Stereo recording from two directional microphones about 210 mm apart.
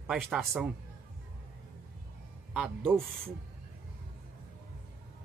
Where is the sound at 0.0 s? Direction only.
5° right (ahead or behind).